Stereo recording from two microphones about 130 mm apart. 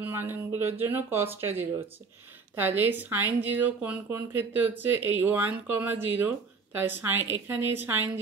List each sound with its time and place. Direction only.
0.0 s speech: 15° right (ahead or behind)